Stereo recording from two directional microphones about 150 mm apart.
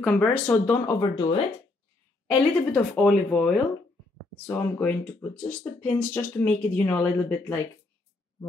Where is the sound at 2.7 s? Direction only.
5° left (ahead or behind).